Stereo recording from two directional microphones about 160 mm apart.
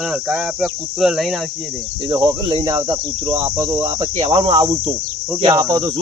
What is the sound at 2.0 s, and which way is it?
Cricket, 25° right (ahead or behind).